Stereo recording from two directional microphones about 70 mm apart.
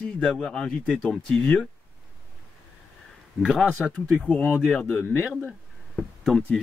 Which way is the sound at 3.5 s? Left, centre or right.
Centre.